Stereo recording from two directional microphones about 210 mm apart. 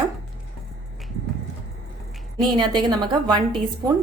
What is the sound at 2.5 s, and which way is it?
Speech, 20° right (ahead or behind).